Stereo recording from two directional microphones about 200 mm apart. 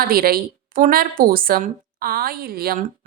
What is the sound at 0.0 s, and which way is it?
A woman's voice, 50° right (ahead or behind).